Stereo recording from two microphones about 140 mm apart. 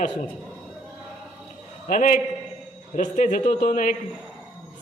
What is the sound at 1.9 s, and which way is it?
A man's voice, 70° left (ahead or behind).